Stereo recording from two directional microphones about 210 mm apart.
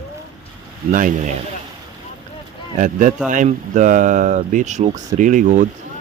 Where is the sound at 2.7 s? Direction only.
35° right (ahead or behind).